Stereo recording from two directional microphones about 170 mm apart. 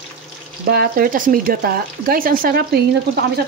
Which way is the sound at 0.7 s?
60° right (ahead or behind).